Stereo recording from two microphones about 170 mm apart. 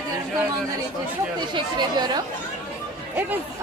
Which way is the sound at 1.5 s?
25° right (ahead or behind).